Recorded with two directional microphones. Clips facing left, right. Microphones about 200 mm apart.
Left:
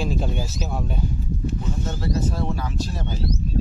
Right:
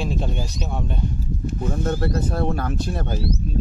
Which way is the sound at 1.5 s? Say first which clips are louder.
Right 8 dB; 55° right (ahead or behind).